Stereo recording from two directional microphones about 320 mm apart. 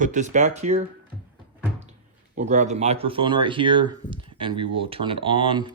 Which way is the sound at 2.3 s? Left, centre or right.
Right.